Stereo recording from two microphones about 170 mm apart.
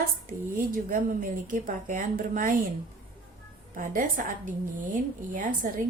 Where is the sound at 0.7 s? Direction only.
55° right (ahead or behind).